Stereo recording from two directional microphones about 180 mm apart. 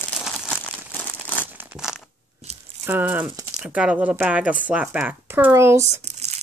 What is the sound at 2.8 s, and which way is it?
Speech, 10° right (ahead or behind).